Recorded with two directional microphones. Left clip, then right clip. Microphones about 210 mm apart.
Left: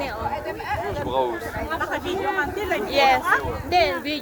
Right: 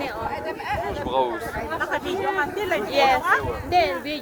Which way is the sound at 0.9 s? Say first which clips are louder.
Right 1 dB; 30° right (ahead or behind).